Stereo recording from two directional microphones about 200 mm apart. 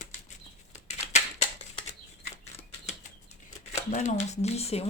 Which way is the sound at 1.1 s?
35° left (ahead or behind).